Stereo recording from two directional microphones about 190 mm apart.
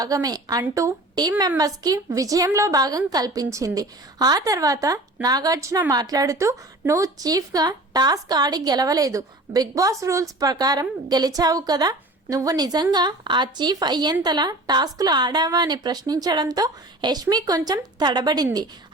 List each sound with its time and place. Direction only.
0.0 s a woman's voice: 20° right (ahead or behind)